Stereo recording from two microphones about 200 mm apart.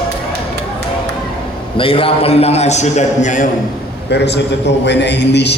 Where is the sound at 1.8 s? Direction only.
25° left (ahead or behind).